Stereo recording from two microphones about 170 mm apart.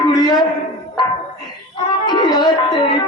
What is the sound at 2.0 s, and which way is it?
Music, 25° left (ahead or behind).